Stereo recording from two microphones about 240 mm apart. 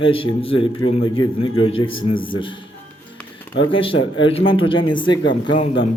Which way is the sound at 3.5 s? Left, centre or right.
Left.